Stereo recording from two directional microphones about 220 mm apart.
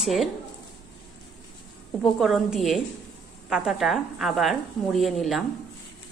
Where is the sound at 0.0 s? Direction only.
Centre (ahead or behind).